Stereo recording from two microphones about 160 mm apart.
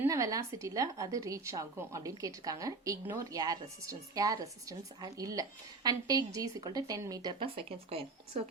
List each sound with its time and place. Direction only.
0.0 s a woman's voice: 20° right (ahead or behind); by 8.4 s 40° right (ahead or behind)